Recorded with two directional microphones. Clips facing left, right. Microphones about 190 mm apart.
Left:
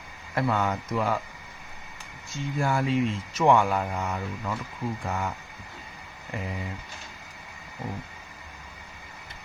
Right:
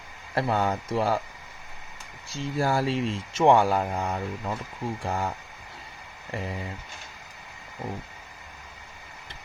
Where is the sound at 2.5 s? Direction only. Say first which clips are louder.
Even; 35° right (ahead or behind).